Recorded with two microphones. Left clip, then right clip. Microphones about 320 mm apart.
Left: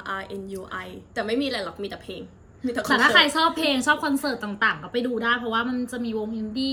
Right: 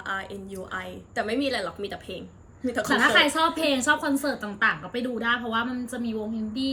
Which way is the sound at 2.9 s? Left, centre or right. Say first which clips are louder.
Left 3 dB; centre.